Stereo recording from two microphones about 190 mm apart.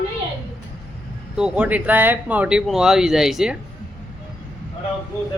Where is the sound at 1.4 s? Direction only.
5° right (ahead or behind).